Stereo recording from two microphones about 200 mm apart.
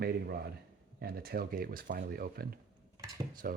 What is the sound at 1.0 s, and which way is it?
Speech, 50° right (ahead or behind).